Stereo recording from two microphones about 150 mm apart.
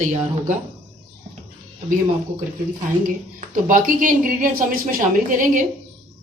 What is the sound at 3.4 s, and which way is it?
Speech, 60° right (ahead or behind).